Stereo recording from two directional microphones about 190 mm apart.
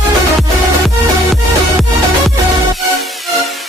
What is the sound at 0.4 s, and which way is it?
Music, centre (ahead or behind).